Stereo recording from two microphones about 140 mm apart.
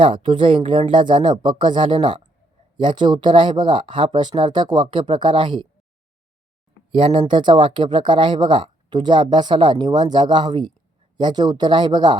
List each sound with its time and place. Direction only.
0.0 s speech: 35° right (ahead or behind)
6.9 s speech: 35° right (ahead or behind)